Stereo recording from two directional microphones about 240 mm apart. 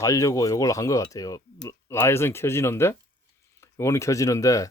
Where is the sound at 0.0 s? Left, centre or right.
Centre.